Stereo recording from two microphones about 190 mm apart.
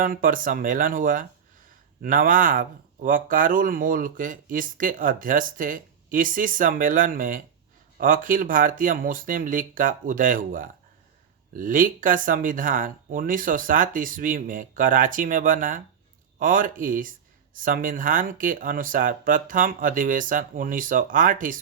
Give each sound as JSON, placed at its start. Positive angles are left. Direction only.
{"t": 0.0, "sound": "speech", "side_deg": -45}